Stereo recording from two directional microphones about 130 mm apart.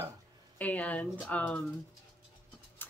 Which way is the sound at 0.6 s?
10° left (ahead or behind).